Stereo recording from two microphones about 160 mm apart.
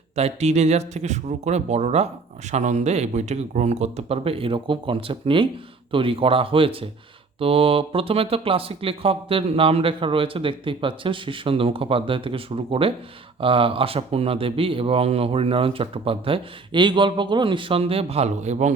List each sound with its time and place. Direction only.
0.2 s speech: 40° right (ahead or behind)